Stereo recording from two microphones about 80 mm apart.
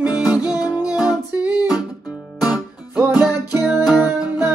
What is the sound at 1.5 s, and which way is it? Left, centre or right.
Music, left.